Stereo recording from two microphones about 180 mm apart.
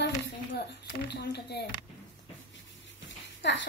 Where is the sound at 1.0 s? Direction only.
65° left (ahead or behind).